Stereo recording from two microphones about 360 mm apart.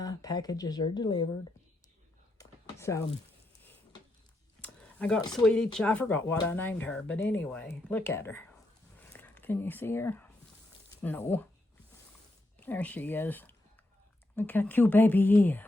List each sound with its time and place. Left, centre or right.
0.0 s speech: centre
2.4 s a sound: centre
4.6 s speech: centre
9.0 s a sound: centre
11.0 s speech: centre
12.5 s speech: centre